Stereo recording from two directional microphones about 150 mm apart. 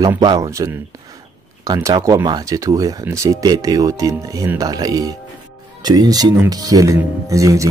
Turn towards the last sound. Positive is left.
turn(degrees=-20)  # may be behind; listen again after turning